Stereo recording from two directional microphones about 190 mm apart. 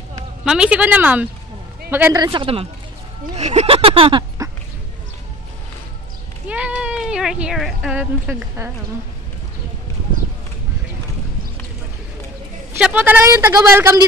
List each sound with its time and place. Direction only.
0.5 s a woman's voice: 5° right (ahead or behind); by 4.2 s 30° right (ahead or behind)
4.4 s dog: 20° right (ahead or behind)
6.4 s speech: 5° right (ahead or behind)
12.7 s a woman's voice: 10° right (ahead or behind)